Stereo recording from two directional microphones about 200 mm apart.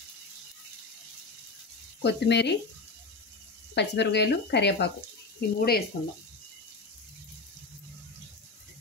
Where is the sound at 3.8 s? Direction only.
60° left (ahead or behind).